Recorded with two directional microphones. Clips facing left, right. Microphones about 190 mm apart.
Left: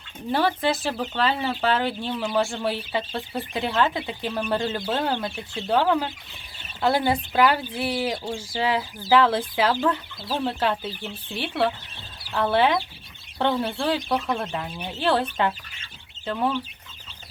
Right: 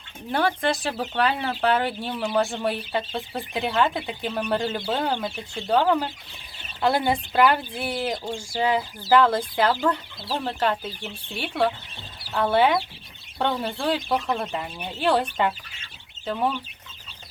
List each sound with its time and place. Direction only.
0.3 s speech: 5° left (ahead or behind)
11.0 s speech: 10° right (ahead or behind)